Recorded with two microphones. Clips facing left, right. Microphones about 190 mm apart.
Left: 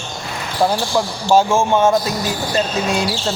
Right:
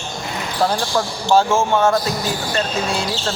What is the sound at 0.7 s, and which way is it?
Speech, 15° left (ahead or behind).